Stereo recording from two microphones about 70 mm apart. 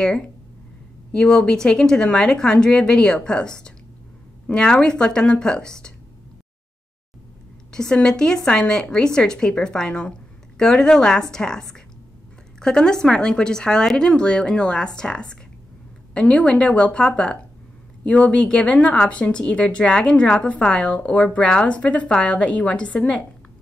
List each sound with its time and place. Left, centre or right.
1.1 s speech: centre
7.7 s speech: centre